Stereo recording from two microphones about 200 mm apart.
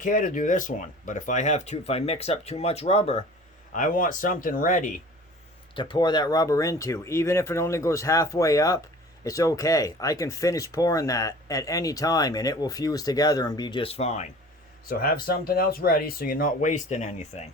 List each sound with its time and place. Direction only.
0.0 s speech: 40° left (ahead or behind)
3.7 s speech: 40° left (ahead or behind)
5.7 s speech: 25° left (ahead or behind)
14.8 s speech: 50° left (ahead or behind)